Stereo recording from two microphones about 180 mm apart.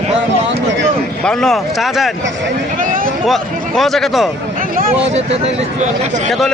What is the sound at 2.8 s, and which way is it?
Speech, 50° right (ahead or behind).